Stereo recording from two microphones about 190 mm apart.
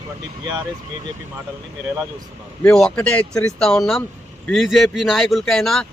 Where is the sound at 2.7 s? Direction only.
5° left (ahead or behind).